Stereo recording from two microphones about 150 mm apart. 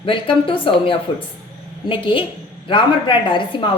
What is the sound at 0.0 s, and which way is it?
A woman's voice, 35° left (ahead or behind).